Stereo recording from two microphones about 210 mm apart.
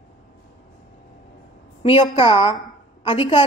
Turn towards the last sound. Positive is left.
turn(degrees=25)  # may be behind; listen again after turning